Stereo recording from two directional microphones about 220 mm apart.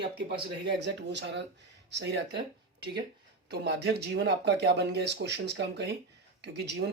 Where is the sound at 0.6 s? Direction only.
50° right (ahead or behind).